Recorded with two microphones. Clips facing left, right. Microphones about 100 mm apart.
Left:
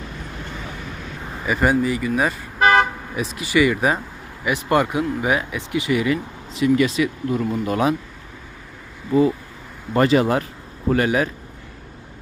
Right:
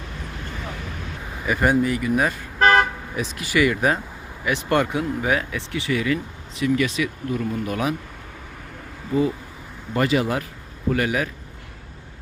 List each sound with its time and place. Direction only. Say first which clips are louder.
1.5 s speech: left 1 dB; centre (ahead or behind); by 7.9 s 30° left (ahead or behind)
9.9 s speech: left 4 dB; 40° left (ahead or behind)